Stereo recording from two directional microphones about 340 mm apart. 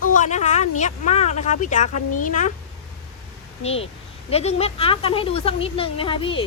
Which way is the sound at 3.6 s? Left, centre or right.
Centre.